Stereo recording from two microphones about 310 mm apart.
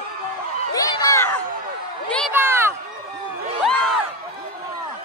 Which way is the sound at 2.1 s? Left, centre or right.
Centre.